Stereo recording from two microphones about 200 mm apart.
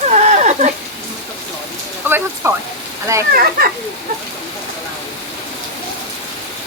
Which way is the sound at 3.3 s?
45° right (ahead or behind).